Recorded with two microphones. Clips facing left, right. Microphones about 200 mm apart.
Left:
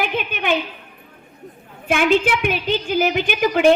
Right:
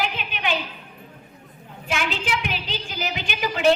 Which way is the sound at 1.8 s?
55° left (ahead or behind).